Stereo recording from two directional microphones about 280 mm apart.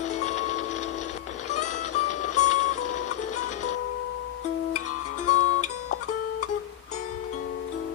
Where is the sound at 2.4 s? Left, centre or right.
Left.